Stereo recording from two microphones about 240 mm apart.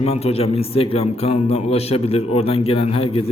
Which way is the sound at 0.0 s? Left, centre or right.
Left.